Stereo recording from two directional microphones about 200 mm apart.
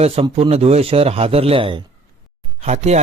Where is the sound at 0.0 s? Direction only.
30° right (ahead or behind).